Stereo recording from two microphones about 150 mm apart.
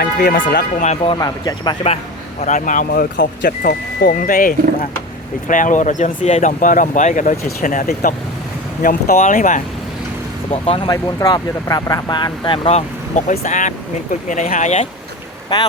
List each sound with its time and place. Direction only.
0.0 s speech: 90° left; by 1.1 s 50° left (ahead or behind)
1.1 s speech: 25° left (ahead or behind)
2.4 s speech: 55° left (ahead or behind)
10.8 s speech: 25° left (ahead or behind); by 14.8 s 50° left (ahead or behind)
15.5 s speech: 25° left (ahead or behind)